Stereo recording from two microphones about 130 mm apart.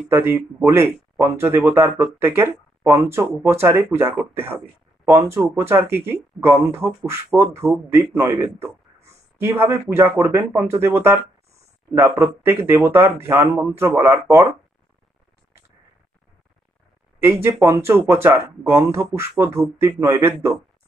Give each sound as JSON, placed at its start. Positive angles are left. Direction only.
{"t": 0.1, "sound": "speech", "side_deg": -15}
{"t": 17.2, "sound": "speech", "side_deg": -20}